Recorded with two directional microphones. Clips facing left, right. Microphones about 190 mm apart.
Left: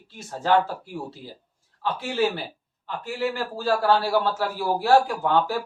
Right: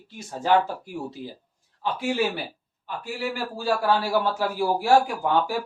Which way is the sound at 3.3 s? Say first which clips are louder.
Left 1 dB; 10° right (ahead or behind).